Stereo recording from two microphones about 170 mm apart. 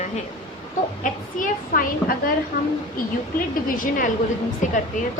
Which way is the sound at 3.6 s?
55° left (ahead or behind).